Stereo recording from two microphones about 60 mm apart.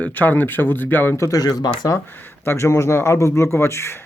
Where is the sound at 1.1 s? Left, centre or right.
Left.